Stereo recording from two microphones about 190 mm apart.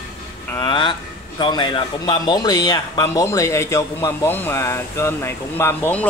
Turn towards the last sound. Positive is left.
turn(degrees=10)  # may be behind; listen again after turning